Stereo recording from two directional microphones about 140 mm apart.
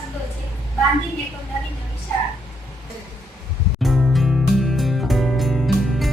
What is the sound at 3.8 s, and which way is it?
Music, centre (ahead or behind).